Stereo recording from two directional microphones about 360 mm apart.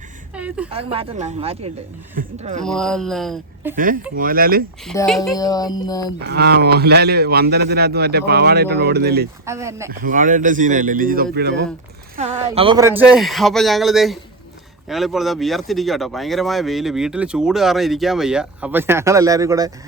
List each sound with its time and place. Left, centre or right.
0.3 s a sound: centre
0.7 s a man's voice: centre
2.6 s speech: centre
3.8 s a man's voice: right
4.9 s a woman's voice: centre
6.2 s a man's voice: right
9.5 s speech: centre
10.0 s a man's voice: right
12.3 s speech: centre